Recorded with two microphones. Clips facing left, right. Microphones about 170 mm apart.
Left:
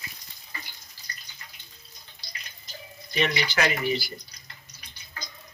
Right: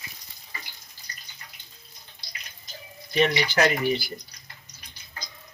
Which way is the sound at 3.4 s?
50° right (ahead or behind).